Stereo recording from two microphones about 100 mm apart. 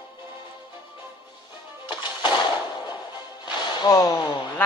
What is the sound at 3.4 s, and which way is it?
Music, 40° left (ahead or behind).